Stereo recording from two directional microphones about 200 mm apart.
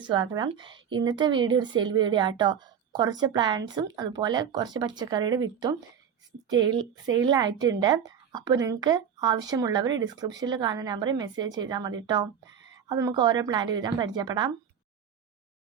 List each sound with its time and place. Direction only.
0.0 s a woman's voice: 25° right (ahead or behind)